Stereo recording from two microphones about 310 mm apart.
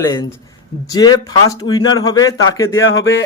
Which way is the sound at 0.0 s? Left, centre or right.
Centre.